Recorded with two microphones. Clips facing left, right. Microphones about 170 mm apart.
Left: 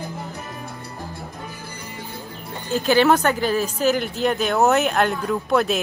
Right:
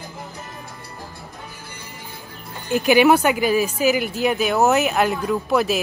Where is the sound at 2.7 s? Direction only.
15° right (ahead or behind).